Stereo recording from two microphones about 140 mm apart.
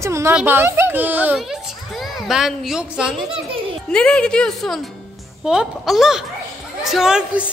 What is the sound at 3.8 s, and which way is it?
Speech, 5° left (ahead or behind).